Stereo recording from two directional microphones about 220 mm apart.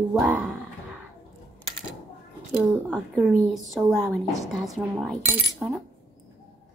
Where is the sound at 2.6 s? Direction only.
Centre (ahead or behind).